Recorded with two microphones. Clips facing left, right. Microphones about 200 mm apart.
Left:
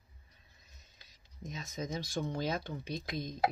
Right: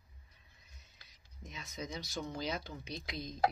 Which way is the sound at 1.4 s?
45° left (ahead or behind).